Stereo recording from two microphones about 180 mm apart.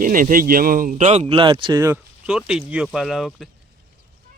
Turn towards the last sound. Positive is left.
turn(degrees=0)  # may be behind; listen again after turning